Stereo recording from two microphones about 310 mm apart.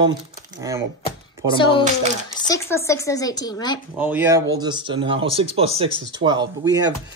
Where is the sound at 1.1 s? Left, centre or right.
Centre.